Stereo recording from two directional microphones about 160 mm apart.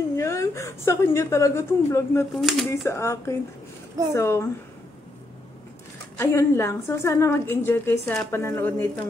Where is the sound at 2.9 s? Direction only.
15° left (ahead or behind).